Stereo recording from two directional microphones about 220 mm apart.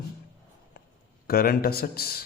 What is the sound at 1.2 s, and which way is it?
A man's voice, 45° left (ahead or behind).